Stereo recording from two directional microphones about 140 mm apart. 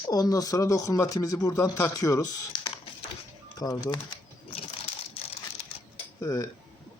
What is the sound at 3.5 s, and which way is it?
Typing, 25° left (ahead or behind).